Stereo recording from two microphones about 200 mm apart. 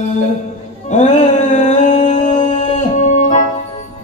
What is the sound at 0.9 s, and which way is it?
Music, 35° left (ahead or behind).